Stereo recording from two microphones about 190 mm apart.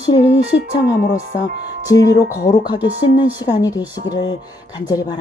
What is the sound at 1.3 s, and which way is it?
A woman's voice, 20° left (ahead or behind).